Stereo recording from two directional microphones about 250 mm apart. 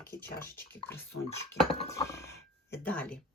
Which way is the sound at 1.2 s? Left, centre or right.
Left.